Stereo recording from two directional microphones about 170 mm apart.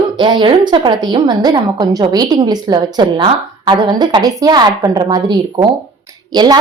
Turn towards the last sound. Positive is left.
turn(degrees=-25)  # may be behind; listen again after turning